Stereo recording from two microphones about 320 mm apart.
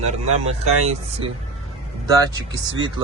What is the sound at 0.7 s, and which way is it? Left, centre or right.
Speech, centre.